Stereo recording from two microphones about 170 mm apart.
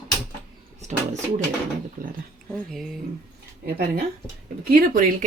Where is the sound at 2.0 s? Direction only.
55° right (ahead or behind).